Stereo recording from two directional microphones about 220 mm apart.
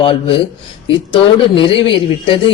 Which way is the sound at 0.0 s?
25° left (ahead or behind).